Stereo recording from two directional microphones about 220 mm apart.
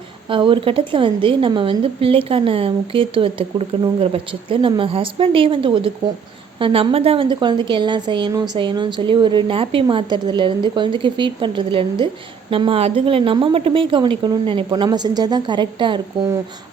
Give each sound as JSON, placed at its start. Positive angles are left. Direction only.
{"t": 0.3, "sound": "a woman's voice", "side_deg": -20}